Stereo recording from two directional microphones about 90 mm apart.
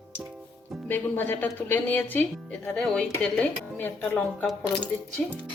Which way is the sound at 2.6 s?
10° left (ahead or behind).